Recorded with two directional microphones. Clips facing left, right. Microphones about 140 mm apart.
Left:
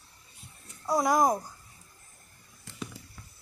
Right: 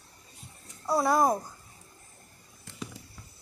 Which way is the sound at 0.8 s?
15° left (ahead or behind).